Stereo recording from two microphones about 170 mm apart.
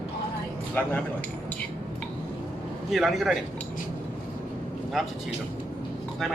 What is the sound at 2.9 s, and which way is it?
Speech, centre (ahead or behind).